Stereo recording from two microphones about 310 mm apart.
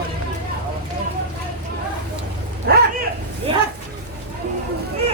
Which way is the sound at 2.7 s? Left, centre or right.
Right.